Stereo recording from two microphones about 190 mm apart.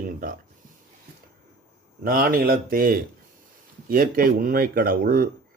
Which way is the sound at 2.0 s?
50° right (ahead or behind).